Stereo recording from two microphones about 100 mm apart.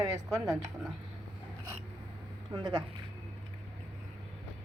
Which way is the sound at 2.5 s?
45° right (ahead or behind).